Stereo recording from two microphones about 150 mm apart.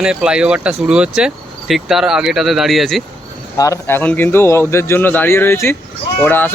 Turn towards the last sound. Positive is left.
turn(degrees=10)  # may be behind; listen again after turning